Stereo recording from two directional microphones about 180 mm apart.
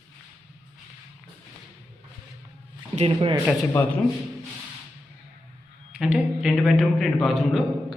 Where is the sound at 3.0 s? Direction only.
30° right (ahead or behind).